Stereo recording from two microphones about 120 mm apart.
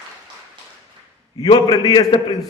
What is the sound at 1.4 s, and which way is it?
Speech, 40° left (ahead or behind).